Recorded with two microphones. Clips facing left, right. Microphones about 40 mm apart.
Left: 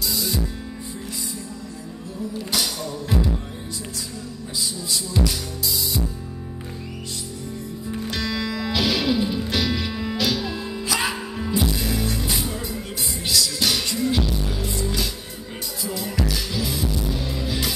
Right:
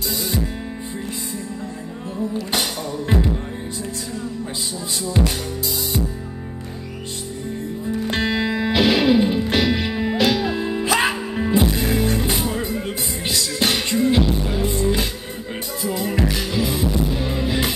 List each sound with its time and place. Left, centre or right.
0.1 s music: right
2.5 s music: right
5.2 s music: right
8.1 s music: right